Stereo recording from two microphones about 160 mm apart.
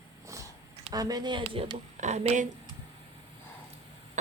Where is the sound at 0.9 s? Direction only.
25° right (ahead or behind).